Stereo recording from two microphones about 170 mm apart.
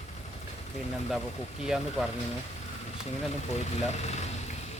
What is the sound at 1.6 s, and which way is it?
Speech, 5° right (ahead or behind).